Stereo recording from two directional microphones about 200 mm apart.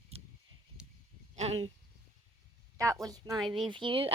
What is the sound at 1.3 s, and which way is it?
Speech, 30° right (ahead or behind).